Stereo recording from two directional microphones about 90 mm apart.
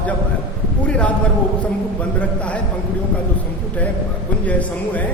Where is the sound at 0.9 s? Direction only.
15° left (ahead or behind).